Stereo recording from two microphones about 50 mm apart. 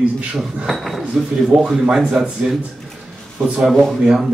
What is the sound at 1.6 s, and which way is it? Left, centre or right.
Speech, centre.